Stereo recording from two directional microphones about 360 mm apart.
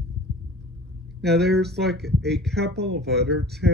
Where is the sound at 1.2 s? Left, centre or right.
Right.